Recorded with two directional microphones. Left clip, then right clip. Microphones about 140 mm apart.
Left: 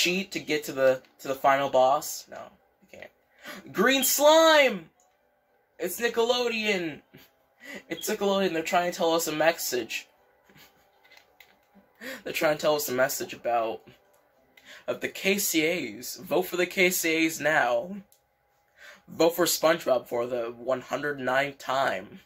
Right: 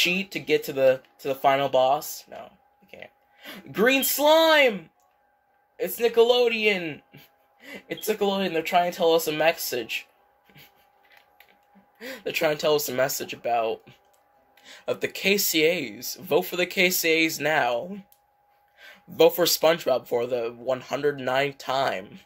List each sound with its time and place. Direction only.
0.0 s speech: 65° right (ahead or behind)
2.3 s speech: 65° right (ahead or behind)
12.0 s speech: 65° right (ahead or behind)